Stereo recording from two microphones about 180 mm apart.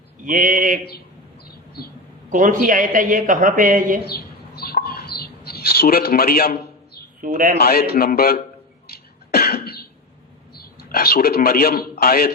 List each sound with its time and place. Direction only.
0.3 s speech: 50° right (ahead or behind)
2.3 s speech: 45° right (ahead or behind)
4.0 s bird: 60° left (ahead or behind)
7.2 s speech: 50° right (ahead or behind)
7.6 s a man's voice: 60° left (ahead or behind)
9.3 s cough: 55° left (ahead or behind)
10.8 s a man's voice: 60° left (ahead or behind)